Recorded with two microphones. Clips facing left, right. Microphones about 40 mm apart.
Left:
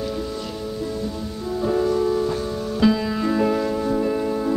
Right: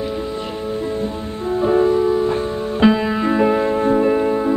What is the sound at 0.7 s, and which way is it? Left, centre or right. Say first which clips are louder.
Music: right 6 dB; right.